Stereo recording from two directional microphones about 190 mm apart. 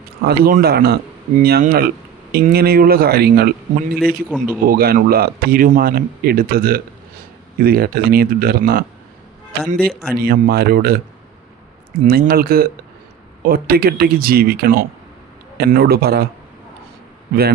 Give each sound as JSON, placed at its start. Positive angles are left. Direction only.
{"t": 0.3, "sound": "speech", "side_deg": -55}
{"t": 4.3, "sound": "speech", "side_deg": -5}
{"t": 4.6, "sound": "speech", "side_deg": -50}
{"t": 10.2, "sound": "speech", "side_deg": -55}
{"t": 12.0, "sound": "speech", "side_deg": -55}